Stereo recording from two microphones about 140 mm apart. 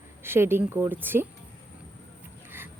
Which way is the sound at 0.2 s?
15° right (ahead or behind).